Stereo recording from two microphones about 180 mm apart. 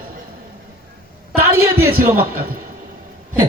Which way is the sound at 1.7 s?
55° right (ahead or behind).